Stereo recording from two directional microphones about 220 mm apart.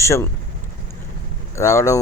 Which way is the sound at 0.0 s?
15° left (ahead or behind).